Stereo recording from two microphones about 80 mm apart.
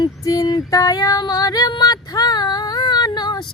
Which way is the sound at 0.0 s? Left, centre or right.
Left.